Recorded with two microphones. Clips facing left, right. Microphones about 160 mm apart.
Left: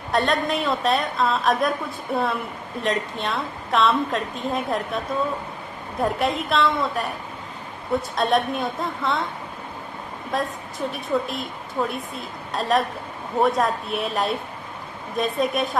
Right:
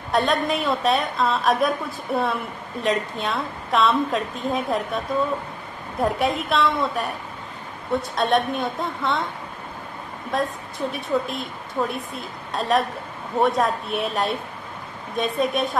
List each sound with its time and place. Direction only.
0.1 s a woman's voice: centre (ahead or behind)
10.3 s a woman's voice: centre (ahead or behind)